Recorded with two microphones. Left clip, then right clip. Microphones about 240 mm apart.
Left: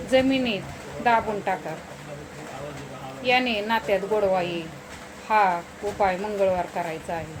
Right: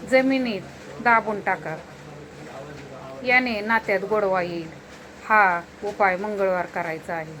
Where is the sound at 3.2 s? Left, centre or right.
Right.